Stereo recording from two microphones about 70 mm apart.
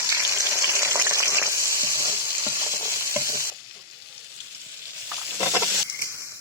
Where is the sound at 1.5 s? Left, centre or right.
Left.